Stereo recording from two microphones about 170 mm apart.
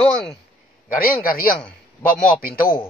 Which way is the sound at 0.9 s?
55° left (ahead or behind).